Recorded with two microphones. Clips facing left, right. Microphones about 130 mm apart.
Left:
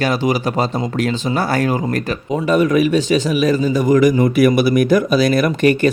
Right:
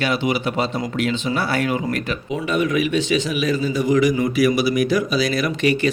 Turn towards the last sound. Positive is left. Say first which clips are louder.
# left 5 dB
turn(degrees=50)  # may be behind; listen again after turning